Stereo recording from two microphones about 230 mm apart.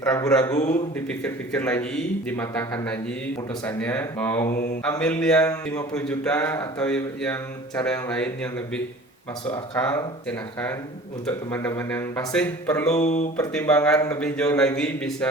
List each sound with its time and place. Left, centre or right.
0.0 s speech: centre
0.5 s speech: left
0.9 s speech: centre
4.5 s mantra: left
4.8 s speech: centre
12.9 s speech: left
13.3 s speech: centre